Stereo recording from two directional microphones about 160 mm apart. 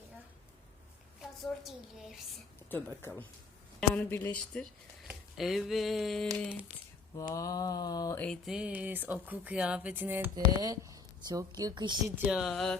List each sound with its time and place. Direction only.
1.6 s a woman's voice: centre (ahead or behind)
2.6 s speech: 15° left (ahead or behind)
4.6 s speech: centre (ahead or behind)
7.2 s mantra: 20° left (ahead or behind)
8.2 s a woman's voice: 5° left (ahead or behind)
8.5 s speech: 10° right (ahead or behind); by 12.1 s 25° right (ahead or behind)
12.3 s a woman's voice: centre (ahead or behind)